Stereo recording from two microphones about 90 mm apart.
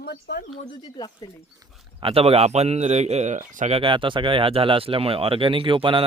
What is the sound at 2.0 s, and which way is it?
Speech, 85° right.